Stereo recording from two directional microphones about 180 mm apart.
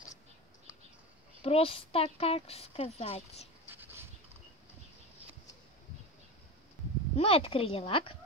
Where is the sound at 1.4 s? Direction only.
30° left (ahead or behind).